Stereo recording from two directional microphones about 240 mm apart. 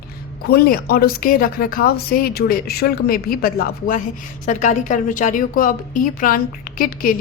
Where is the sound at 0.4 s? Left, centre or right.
Left.